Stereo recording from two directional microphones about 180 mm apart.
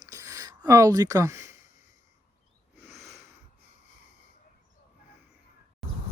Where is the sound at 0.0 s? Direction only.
20° right (ahead or behind).